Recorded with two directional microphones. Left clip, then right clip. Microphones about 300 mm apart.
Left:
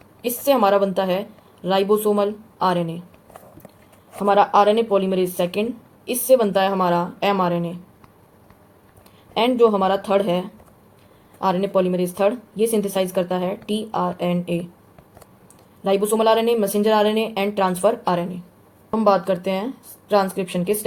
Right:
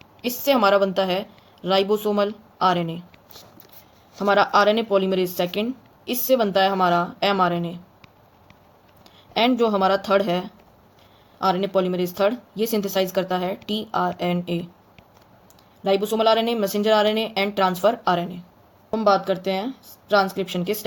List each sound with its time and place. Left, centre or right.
0.2 s a woman's voice: right
4.3 s a woman's voice: right
9.3 s a woman's voice: right
15.8 s a woman's voice: right